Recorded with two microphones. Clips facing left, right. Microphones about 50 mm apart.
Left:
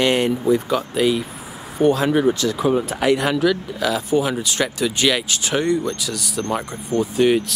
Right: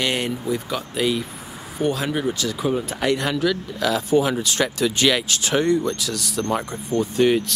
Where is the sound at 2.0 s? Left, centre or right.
Left.